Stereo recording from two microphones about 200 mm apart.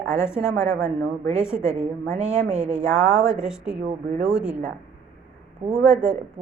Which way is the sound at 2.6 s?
5° right (ahead or behind).